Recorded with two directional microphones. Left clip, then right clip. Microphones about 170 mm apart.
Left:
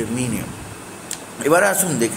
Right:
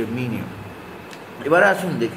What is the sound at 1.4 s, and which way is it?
Speech, 25° left (ahead or behind).